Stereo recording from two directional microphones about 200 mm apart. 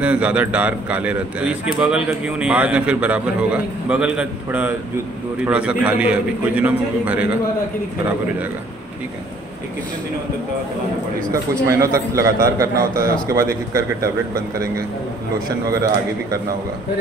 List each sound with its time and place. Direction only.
0.0 s a man's voice: 5° right (ahead or behind)
11.6 s a man's voice: 15° right (ahead or behind)
12.9 s speech: 50° right (ahead or behind)
13.5 s a man's voice: 15° right (ahead or behind)